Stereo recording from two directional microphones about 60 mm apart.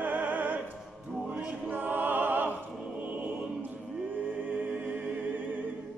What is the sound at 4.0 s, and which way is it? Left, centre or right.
Music, right.